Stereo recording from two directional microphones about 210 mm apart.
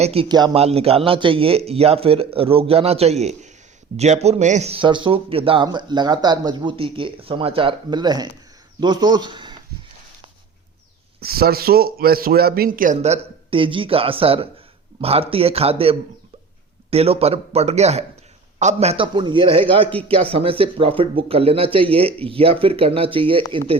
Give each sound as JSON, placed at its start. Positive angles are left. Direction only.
{"t": 0.0, "sound": "speech", "side_deg": -25}
{"t": 11.2, "sound": "speech", "side_deg": -45}